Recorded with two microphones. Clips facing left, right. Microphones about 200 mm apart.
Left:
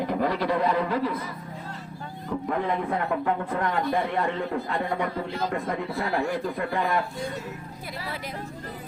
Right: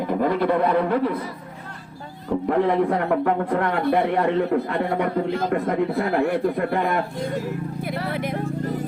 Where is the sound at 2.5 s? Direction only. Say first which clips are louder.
Right 8 dB; 70° right (ahead or behind).